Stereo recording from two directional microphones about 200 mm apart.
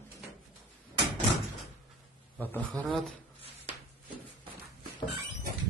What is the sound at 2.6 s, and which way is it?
Speech, 5° left (ahead or behind).